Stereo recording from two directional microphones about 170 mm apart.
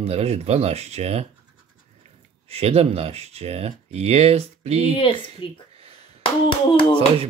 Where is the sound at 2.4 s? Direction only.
35° right (ahead or behind).